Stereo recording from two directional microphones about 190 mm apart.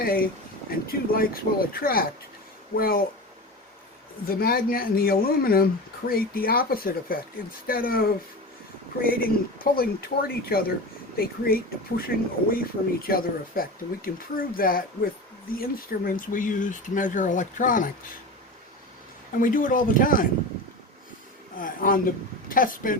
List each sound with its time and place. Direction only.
0.0 s speech: 50° left (ahead or behind)
4.3 s speech: 50° left (ahead or behind)
19.4 s speech: 45° left (ahead or behind)
21.5 s speech: 45° left (ahead or behind)